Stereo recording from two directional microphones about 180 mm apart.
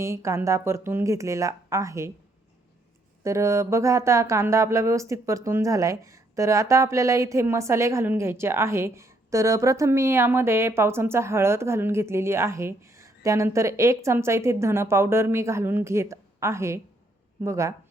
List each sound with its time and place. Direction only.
0.0 s speech: 15° right (ahead or behind)
3.2 s speech: 15° right (ahead or behind)